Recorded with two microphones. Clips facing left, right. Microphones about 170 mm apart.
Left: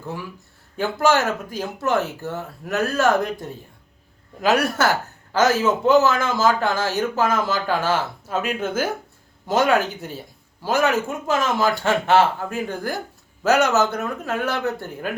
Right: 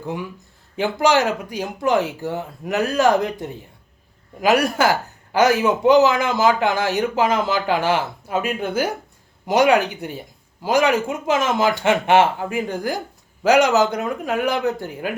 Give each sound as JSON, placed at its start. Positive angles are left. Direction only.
{"t": 0.0, "sound": "speech", "side_deg": -20}
{"t": 4.4, "sound": "speech", "side_deg": -10}
{"t": 9.5, "sound": "speech", "side_deg": -15}